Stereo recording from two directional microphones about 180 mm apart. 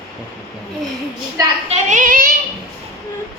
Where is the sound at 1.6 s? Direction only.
40° right (ahead or behind).